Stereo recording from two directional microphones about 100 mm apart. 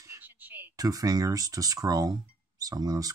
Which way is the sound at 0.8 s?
35° right (ahead or behind).